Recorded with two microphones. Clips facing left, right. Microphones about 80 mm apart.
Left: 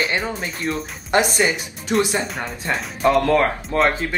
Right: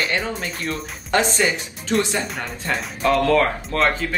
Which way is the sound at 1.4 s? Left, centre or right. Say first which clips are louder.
Left 1 dB; centre.